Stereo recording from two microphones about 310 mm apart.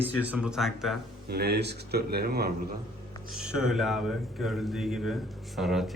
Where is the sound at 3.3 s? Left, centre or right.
Centre.